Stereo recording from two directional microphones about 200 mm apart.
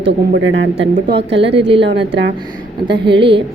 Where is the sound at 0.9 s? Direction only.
45° right (ahead or behind).